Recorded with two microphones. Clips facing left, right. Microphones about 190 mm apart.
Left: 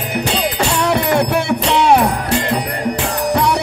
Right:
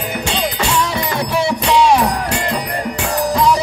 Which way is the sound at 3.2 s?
65° left (ahead or behind).